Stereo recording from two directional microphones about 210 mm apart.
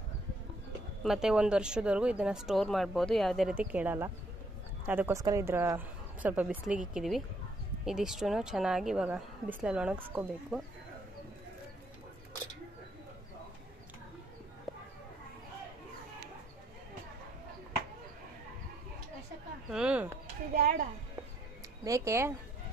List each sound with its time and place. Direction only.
1.0 s speech: centre (ahead or behind)
19.7 s chop: 5° right (ahead or behind)
20.5 s music: 40° right (ahead or behind)
21.8 s speech: 15° right (ahead or behind)